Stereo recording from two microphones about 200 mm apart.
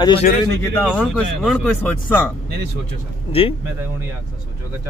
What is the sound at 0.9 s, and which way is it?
Speech, 5° left (ahead or behind).